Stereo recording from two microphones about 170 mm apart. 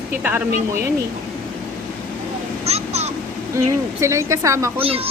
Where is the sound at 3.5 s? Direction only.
15° right (ahead or behind).